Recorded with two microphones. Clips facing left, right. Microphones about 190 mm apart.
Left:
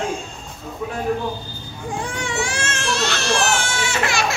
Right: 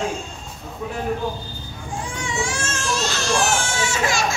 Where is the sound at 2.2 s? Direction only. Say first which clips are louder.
Right 1 dB; 65° left (ahead or behind).